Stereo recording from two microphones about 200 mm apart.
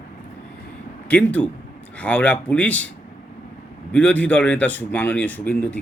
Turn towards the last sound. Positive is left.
turn(degrees=10)  # may be behind; listen again after turning